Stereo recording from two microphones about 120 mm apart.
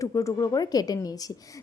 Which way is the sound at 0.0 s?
25° left (ahead or behind).